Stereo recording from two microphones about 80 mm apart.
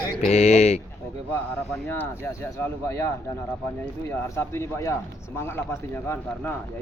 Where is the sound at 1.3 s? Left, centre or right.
Left.